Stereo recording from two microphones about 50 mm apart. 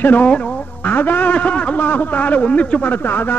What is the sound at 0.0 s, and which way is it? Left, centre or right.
A man's voice, left.